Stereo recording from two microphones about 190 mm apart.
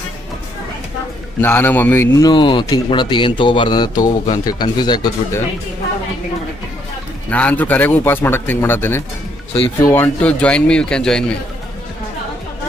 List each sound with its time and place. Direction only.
1.4 s a man's voice: 10° left (ahead or behind)
7.2 s speech: 5° left (ahead or behind)